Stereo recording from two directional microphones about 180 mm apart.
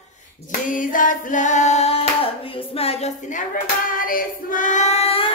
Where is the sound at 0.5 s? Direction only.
50° left (ahead or behind).